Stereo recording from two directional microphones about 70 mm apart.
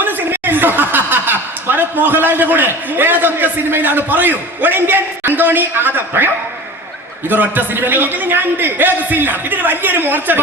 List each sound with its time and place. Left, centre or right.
0.0 s a woman's voice: right